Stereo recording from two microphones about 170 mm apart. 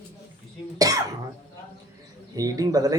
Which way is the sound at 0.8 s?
20° right (ahead or behind).